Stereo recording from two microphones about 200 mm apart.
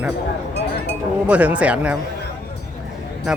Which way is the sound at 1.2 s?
5° right (ahead or behind).